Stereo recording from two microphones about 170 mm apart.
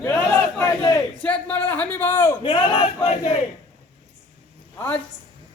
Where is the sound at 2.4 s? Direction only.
30° left (ahead or behind).